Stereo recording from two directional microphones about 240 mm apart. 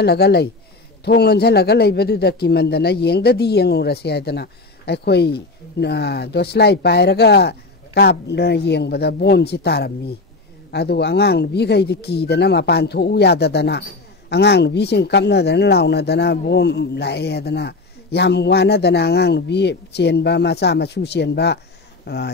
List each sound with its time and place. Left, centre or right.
0.0 s speech: left